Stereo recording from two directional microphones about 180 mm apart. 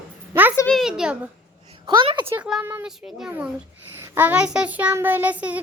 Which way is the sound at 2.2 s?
10° right (ahead or behind).